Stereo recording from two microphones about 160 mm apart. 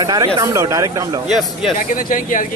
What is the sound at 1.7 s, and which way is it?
Speech, 55° left (ahead or behind).